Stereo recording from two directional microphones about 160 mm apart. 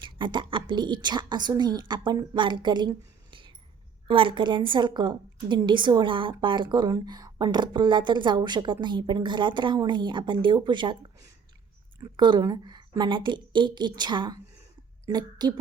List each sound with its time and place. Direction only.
0.0 s a woman's voice: 30° right (ahead or behind)
4.1 s a woman's voice: 35° right (ahead or behind)